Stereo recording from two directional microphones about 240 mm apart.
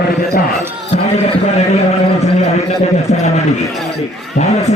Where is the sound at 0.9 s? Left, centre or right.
Left.